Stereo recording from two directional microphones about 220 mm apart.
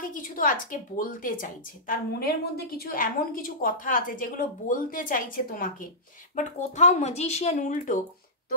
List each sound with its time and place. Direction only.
0.0 s a woman's voice: 35° left (ahead or behind)